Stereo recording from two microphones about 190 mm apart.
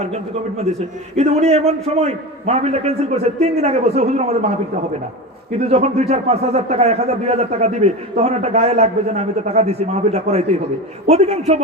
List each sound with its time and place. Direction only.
1.1 s a man's voice: 35° right (ahead or behind)
5.5 s a man's voice: 35° right (ahead or behind)